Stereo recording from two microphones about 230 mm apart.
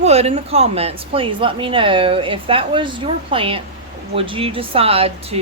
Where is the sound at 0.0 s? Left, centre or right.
Right.